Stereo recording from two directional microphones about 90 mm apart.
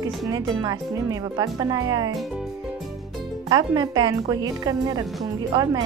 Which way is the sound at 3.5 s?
50° right (ahead or behind).